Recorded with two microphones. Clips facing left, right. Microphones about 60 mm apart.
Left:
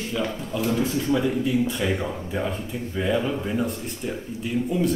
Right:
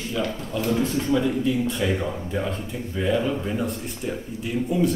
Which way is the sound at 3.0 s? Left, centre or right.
Centre.